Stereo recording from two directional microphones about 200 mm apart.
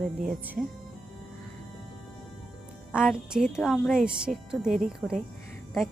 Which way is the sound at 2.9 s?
5° right (ahead or behind).